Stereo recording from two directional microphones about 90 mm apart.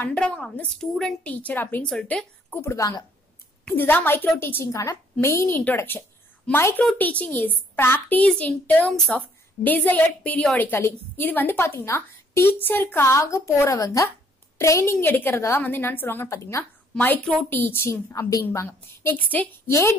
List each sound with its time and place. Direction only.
0.0 s a woman's voice: 10° left (ahead or behind)
1.9 s speech: 10° left (ahead or behind)
2.6 s a woman's voice: 35° left (ahead or behind)
3.6 s a woman's voice: 20° left (ahead or behind)
7.0 s a woman's voice: 15° left (ahead or behind)
8.3 s a woman's voice: 10° left (ahead or behind)
16.3 s a woman's voice: 35° left (ahead or behind)
17.0 s a woman's voice: 15° left (ahead or behind); by 18.8 s 35° left (ahead or behind)
19.0 s a woman's voice: 20° left (ahead or behind)
19.7 s a woman's voice: 30° left (ahead or behind)